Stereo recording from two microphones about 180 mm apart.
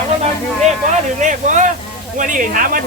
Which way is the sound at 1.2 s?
45° right (ahead or behind).